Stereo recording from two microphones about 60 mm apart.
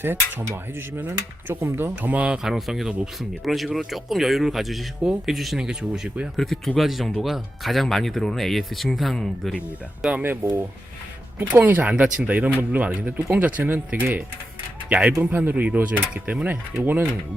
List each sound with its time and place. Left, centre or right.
0.0 s speech: right
2.0 s speech: right
2.4 s speech: centre
5.6 s speech: centre
6.3 s speech: centre
11.3 s speech: right
16.8 s speech: right